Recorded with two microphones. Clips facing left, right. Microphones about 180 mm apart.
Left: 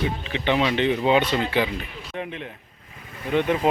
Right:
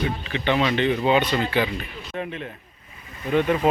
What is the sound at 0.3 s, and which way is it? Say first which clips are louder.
Speech: even; 20° left (ahead or behind).